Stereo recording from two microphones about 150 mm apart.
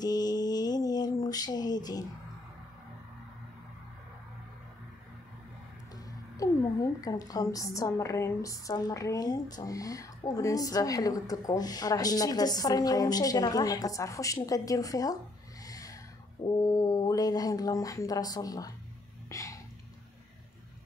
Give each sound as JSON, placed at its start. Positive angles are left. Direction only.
{"t": 0.0, "sound": "mantra", "side_deg": 25}
{"t": 6.3, "sound": "a woman's voice", "side_deg": 20}
{"t": 15.6, "sound": "snort", "side_deg": 25}
{"t": 16.4, "sound": "a woman's voice", "side_deg": 25}
{"t": 19.2, "sound": "a sound", "side_deg": 20}